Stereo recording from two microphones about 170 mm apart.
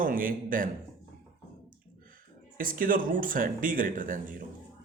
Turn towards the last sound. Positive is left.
turn(degrees=-50)  # may be behind; listen again after turning